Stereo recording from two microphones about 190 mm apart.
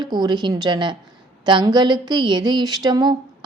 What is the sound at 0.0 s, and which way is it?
A woman's voice, 20° right (ahead or behind).